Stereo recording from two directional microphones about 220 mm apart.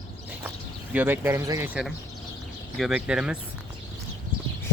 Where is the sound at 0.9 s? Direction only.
10° right (ahead or behind).